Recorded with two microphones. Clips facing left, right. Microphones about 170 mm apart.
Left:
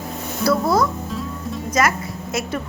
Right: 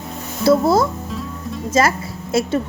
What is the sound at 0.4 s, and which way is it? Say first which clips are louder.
Speech: right 4 dB; 25° right (ahead or behind).